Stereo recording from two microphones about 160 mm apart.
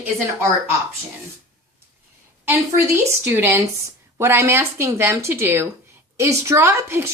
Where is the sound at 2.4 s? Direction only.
15° right (ahead or behind).